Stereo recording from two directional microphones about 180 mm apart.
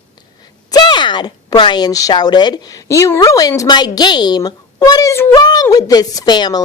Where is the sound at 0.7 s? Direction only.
25° left (ahead or behind).